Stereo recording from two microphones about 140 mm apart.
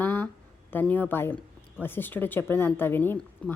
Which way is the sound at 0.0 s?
15° left (ahead or behind).